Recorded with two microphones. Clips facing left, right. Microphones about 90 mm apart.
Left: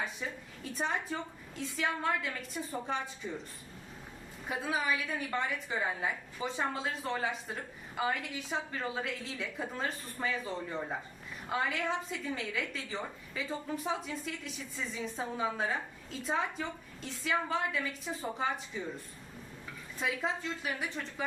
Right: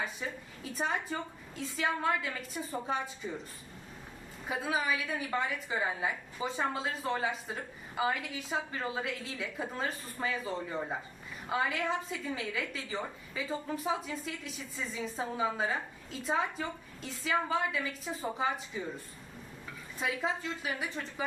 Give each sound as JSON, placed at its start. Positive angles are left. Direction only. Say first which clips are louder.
{"t": 0.0, "sound": "a woman's voice", "louder": "right 1 dB", "side_deg": 0}
{"t": 4.4, "sound": "a woman's voice", "louder": "right 1 dB", "side_deg": 0}